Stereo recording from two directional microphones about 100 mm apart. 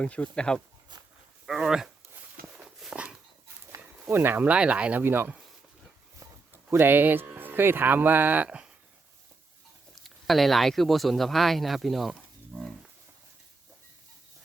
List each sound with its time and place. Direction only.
0.0 s speech: 10° left (ahead or behind)
1.5 s speech: 5° right (ahead or behind)
2.6 s horse: 10° right (ahead or behind)
4.1 s speech: 20° right (ahead or behind)
6.5 s speech: 20° right (ahead or behind)
9.9 s speech: centre (ahead or behind)
12.5 s livestock: centre (ahead or behind)